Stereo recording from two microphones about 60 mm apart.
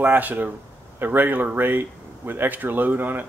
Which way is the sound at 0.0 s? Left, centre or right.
Right.